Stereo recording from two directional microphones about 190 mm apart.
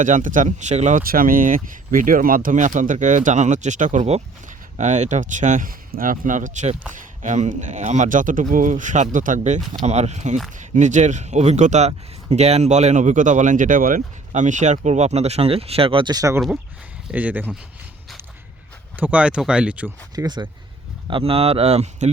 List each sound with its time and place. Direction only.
0.0 s speech: 40° right (ahead or behind); by 16.4 s 20° right (ahead or behind)
17.1 s speech: 10° right (ahead or behind)
18.9 s speech: 10° right (ahead or behind)
20.1 s speech: 20° right (ahead or behind)